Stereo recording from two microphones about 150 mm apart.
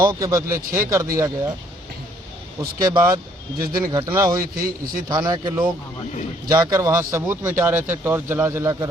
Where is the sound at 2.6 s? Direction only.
25° right (ahead or behind).